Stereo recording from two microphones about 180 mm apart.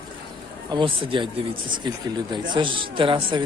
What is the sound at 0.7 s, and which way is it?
Speech, 30° right (ahead or behind).